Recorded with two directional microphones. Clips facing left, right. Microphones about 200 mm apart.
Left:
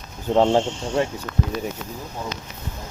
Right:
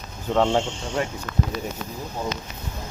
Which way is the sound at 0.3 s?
35° left (ahead or behind).